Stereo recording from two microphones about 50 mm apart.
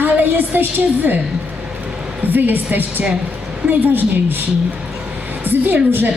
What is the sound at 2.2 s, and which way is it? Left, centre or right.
A woman's voice, right.